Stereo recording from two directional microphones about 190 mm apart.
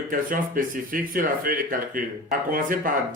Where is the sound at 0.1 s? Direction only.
45° right (ahead or behind).